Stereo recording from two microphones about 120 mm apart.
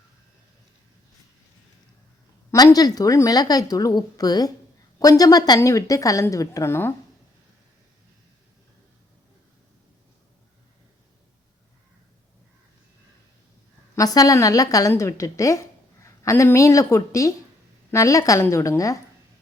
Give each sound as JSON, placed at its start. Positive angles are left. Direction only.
{"t": 2.5, "sound": "a woman's voice", "side_deg": 30}
{"t": 13.9, "sound": "a woman's voice", "side_deg": 30}